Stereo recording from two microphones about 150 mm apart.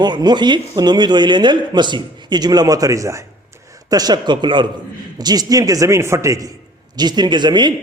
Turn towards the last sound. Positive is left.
turn(degrees=-30)  # may be behind; listen again after turning